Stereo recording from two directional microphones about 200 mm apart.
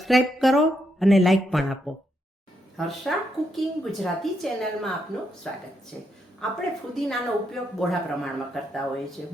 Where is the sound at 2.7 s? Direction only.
Centre (ahead or behind).